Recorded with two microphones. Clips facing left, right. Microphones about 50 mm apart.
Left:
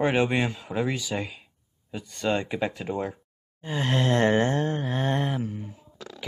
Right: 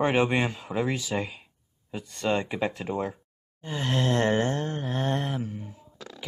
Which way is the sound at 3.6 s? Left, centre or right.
Centre.